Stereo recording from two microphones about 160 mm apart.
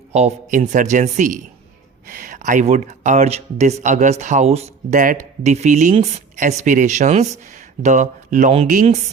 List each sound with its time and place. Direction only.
0.1 s speech: 45° right (ahead or behind)